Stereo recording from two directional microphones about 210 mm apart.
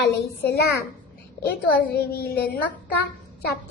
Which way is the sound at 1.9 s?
50° left (ahead or behind).